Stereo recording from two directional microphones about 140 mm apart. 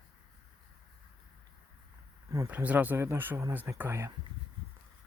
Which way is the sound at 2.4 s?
10° right (ahead or behind).